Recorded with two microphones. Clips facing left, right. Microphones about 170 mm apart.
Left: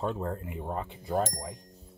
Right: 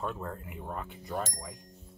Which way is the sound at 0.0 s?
25° left (ahead or behind).